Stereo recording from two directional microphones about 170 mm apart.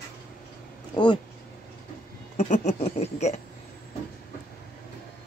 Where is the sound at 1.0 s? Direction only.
30° left (ahead or behind).